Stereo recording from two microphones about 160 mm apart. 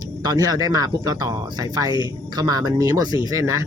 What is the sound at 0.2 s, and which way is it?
Speech, 25° right (ahead or behind).